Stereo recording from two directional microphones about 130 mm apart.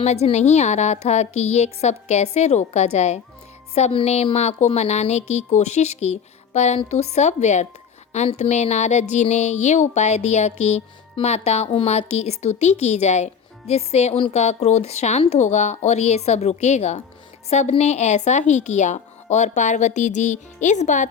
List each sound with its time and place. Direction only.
0.0 s a woman's voice: 55° left (ahead or behind)